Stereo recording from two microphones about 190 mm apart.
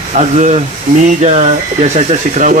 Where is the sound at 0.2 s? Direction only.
35° right (ahead or behind).